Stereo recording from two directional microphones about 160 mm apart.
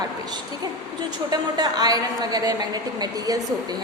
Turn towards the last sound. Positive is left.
turn(degrees=-25)  # may be behind; listen again after turning